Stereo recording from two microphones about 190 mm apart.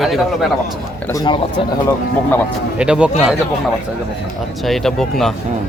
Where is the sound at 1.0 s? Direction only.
20° left (ahead or behind).